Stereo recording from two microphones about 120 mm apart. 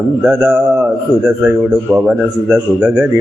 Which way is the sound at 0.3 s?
20° right (ahead or behind).